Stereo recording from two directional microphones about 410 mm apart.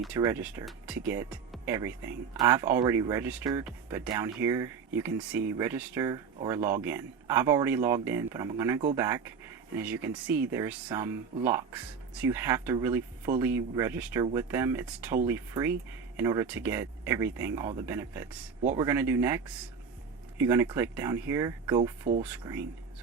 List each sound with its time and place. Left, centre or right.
0.0 s speech: centre
18.6 s speech: centre
18.9 s speech: centre